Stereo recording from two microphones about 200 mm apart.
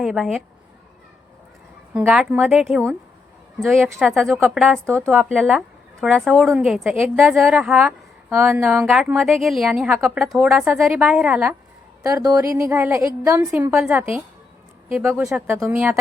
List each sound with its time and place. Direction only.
0.0 s a woman's voice: centre (ahead or behind)
1.9 s a woman's voice: 5° right (ahead or behind)
4.9 s a woman's voice: 10° right (ahead or behind)
12.0 s a woman's voice: 15° right (ahead or behind)
13.5 s a woman's voice: 5° right (ahead or behind)